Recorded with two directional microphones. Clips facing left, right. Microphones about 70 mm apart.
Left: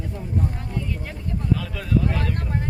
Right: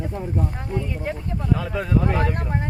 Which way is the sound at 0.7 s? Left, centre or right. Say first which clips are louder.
Right 4 dB; right.